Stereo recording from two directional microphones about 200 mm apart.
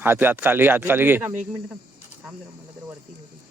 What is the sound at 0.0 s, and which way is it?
Speech, 10° right (ahead or behind).